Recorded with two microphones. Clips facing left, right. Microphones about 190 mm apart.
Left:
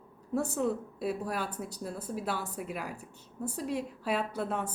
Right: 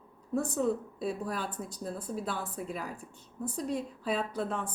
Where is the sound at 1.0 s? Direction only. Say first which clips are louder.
Left 3 dB; 5° left (ahead or behind).